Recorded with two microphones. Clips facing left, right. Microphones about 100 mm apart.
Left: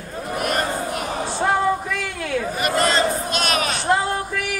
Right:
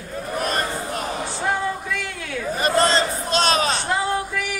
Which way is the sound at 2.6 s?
30° right (ahead or behind).